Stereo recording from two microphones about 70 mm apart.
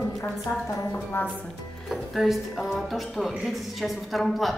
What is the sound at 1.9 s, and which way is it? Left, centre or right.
Speech, centre.